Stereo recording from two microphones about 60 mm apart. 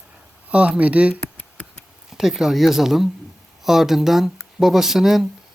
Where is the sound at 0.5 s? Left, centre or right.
Right.